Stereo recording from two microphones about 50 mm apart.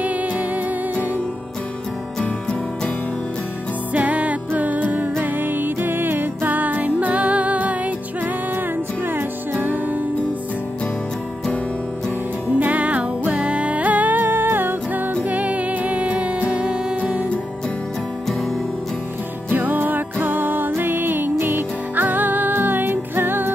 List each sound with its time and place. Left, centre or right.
0.0 s music: right
3.9 s music: right
9.1 s music: right
12.5 s music: right
16.9 s music: right
19.5 s music: right